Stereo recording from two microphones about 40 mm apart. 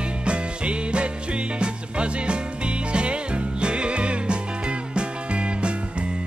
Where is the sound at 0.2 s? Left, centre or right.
Right.